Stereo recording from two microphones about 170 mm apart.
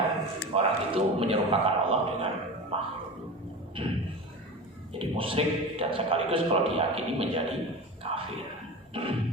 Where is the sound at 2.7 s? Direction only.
35° right (ahead or behind).